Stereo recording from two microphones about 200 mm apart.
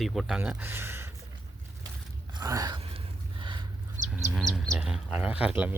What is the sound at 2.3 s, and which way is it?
Gasp, 20° right (ahead or behind).